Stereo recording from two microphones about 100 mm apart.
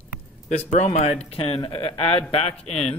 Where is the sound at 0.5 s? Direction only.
90° left.